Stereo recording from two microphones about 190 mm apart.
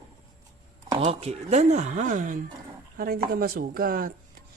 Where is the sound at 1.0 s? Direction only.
35° right (ahead or behind); by 4.1 s 50° right (ahead or behind).